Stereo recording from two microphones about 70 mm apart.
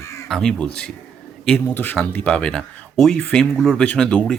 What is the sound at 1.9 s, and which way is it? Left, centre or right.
Speech, centre.